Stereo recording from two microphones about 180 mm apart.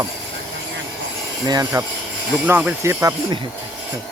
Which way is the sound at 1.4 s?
20° right (ahead or behind).